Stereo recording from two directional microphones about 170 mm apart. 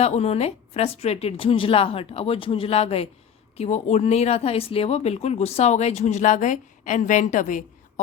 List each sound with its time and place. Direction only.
0.0 s speech: 40° left (ahead or behind)